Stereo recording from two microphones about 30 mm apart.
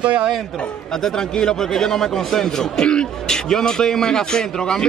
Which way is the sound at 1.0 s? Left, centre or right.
Left.